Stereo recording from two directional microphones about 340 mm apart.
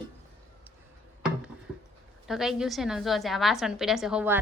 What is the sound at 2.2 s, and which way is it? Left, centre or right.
A woman's voice, centre.